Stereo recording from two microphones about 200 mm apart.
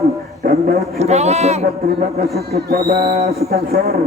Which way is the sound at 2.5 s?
50° right (ahead or behind).